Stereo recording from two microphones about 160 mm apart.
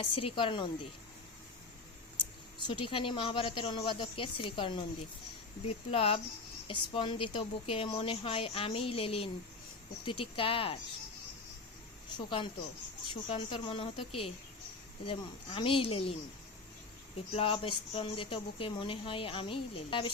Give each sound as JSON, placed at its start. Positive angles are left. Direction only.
{"t": 0.0, "sound": "a woman's voice", "side_deg": 35}
{"t": 2.6, "sound": "a woman's voice", "side_deg": 35}
{"t": 12.1, "sound": "a woman's voice", "side_deg": 30}
{"t": 17.3, "sound": "a woman's voice", "side_deg": 35}